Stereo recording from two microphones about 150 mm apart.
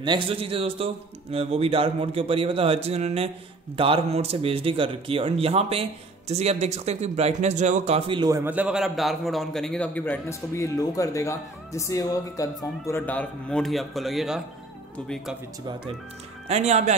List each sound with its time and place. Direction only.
0.0 s a man's voice: 35° right (ahead or behind)
8.2 s a man's voice: 20° right (ahead or behind)
8.5 s a man's voice: 10° right (ahead or behind)
16.4 s speech: 50° right (ahead or behind)